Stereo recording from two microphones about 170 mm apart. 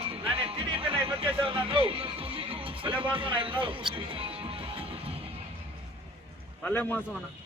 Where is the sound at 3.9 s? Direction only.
30° right (ahead or behind).